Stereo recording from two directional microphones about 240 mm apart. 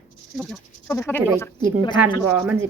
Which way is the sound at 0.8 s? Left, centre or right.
Centre.